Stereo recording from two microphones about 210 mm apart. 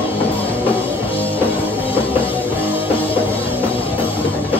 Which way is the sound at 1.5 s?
25° left (ahead or behind).